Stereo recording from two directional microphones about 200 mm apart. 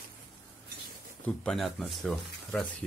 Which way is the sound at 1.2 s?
5° left (ahead or behind).